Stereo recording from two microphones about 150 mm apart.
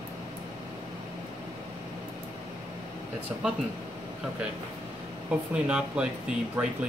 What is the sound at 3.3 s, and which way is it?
Speech, 20° right (ahead or behind).